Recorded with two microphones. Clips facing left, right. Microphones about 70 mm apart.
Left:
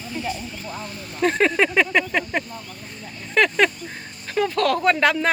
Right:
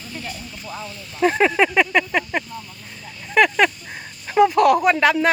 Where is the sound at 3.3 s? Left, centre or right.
Centre.